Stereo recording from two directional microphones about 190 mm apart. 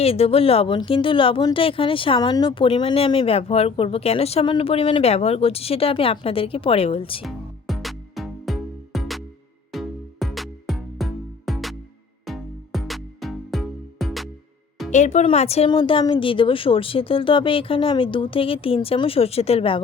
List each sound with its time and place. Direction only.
0.0 s speech: 30° left (ahead or behind)
7.3 s music: centre (ahead or behind)
14.8 s speech: 40° left (ahead or behind)